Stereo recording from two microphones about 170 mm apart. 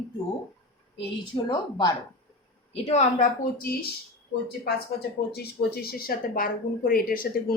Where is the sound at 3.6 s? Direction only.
60° left (ahead or behind).